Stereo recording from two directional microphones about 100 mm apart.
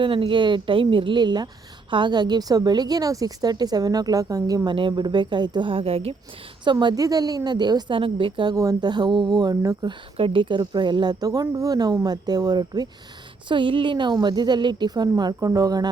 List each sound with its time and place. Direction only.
0.0 s a woman's voice: 60° right (ahead or behind); by 4.7 s 40° right (ahead or behind)
4.7 s speech: 55° right (ahead or behind); by 6.1 s 75° right (ahead or behind)
6.7 s a woman's voice: 50° right (ahead or behind)
7.0 s a woman's voice: 40° right (ahead or behind)
7.9 s a woman's voice: 60° right (ahead or behind); by 9.9 s 40° right (ahead or behind)
10.2 s a woman's voice: 60° right (ahead or behind); by 12.9 s 40° right (ahead or behind)
13.5 s a woman's voice: 55° right (ahead or behind); by 15.9 s 40° right (ahead or behind)